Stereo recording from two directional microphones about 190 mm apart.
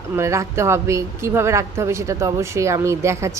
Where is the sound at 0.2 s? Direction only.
15° right (ahead or behind).